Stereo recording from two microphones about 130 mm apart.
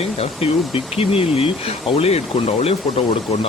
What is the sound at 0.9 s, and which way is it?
A man's voice, 45° left (ahead or behind).